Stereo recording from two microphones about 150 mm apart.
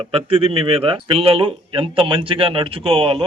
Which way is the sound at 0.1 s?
40° right (ahead or behind).